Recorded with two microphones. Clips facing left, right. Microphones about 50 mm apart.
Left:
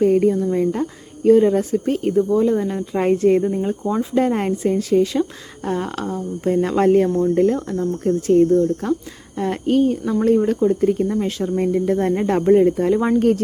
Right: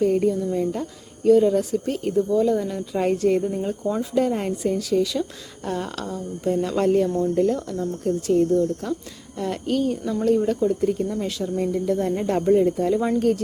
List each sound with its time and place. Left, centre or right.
0.0 s speech: left
3.5 s speech: centre
4.1 s speech: left
5.6 s speech: left